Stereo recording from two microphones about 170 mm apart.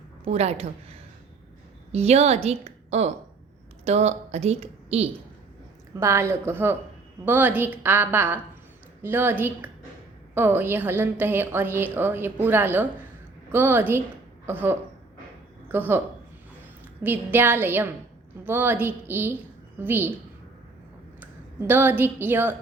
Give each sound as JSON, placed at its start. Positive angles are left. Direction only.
{"t": 0.3, "sound": "a woman's voice", "side_deg": -40}
{"t": 5.9, "sound": "a woman's voice", "side_deg": -15}
{"t": 17.0, "sound": "a woman's voice", "side_deg": -10}
{"t": 21.2, "sound": "speech", "side_deg": -10}